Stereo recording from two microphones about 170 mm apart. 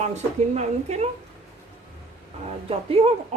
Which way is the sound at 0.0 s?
40° right (ahead or behind).